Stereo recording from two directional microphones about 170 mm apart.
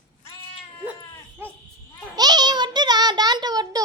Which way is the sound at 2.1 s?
25° right (ahead or behind).